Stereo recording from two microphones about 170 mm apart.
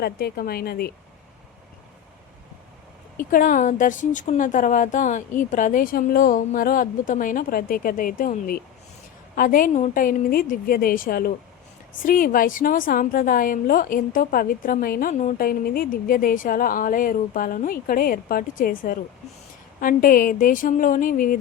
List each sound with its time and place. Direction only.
0.0 s a woman's voice: 65° left (ahead or behind)
3.2 s a woman's voice: 55° left (ahead or behind)